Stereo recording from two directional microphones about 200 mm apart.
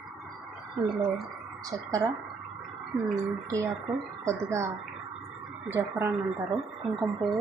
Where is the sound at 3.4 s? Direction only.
15° right (ahead or behind).